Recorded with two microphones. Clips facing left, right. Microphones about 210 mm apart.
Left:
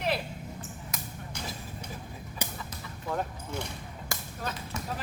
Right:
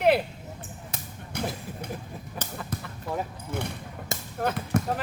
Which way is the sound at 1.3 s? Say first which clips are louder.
Right 10 dB; 55° right (ahead or behind).